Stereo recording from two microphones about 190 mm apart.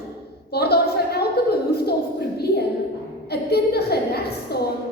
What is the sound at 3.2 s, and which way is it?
A woman's voice, 55° left (ahead or behind).